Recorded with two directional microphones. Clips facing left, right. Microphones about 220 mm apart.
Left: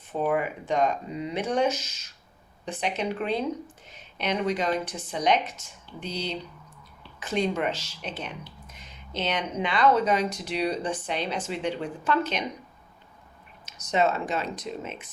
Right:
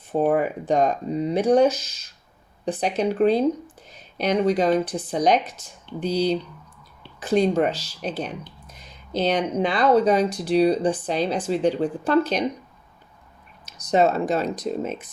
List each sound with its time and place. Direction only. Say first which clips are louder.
0.1 s speech: right 6 dB; 40° right (ahead or behind)
13.7 s speech: right 5 dB; 35° right (ahead or behind)